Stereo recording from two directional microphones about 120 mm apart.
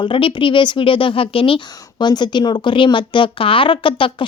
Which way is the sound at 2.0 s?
40° left (ahead or behind).